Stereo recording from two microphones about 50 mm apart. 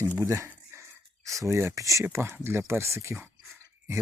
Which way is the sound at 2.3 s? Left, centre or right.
Right.